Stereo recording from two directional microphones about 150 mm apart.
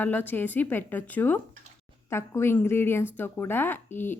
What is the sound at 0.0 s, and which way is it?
Speech, 10° left (ahead or behind).